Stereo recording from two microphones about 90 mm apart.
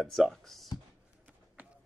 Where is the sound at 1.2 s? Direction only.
15° right (ahead or behind).